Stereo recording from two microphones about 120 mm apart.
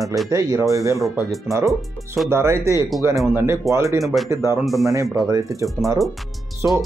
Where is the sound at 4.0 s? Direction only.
Centre (ahead or behind).